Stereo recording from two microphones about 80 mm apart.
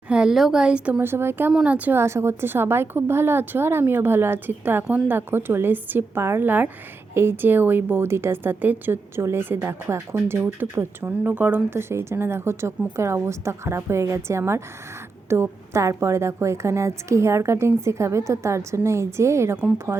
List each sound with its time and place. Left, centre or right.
0.1 s speech: centre
1.0 s a woman's voice: right
1.6 s a woman's voice: centre
2.0 s a woman's voice: right